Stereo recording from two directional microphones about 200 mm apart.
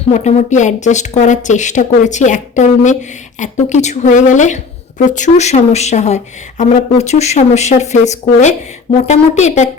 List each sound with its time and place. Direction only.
0.1 s a woman's voice: 35° left (ahead or behind)